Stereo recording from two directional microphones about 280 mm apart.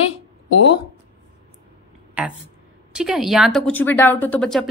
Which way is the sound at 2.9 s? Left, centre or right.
Centre.